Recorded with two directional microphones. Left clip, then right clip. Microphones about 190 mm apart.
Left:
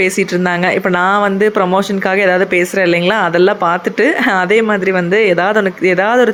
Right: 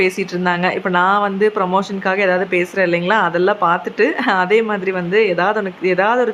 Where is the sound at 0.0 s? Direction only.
25° left (ahead or behind).